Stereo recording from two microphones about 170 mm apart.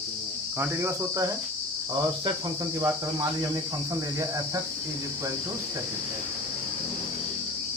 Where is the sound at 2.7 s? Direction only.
20° right (ahead or behind).